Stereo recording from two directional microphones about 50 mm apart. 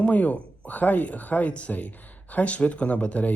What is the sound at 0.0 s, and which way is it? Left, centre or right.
A man's voice, left.